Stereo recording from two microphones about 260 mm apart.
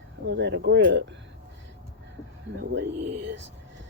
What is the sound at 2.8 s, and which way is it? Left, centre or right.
Speech, right.